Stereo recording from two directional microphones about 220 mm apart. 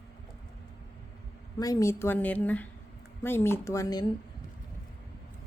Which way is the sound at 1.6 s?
15° left (ahead or behind).